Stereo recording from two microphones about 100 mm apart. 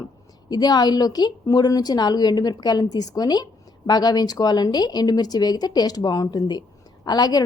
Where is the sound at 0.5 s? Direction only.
40° left (ahead or behind).